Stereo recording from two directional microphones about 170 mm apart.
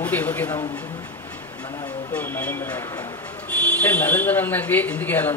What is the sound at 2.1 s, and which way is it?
A man's voice, 10° left (ahead or behind).